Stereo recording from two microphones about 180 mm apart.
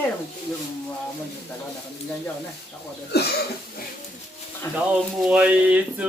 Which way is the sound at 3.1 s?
65° left (ahead or behind).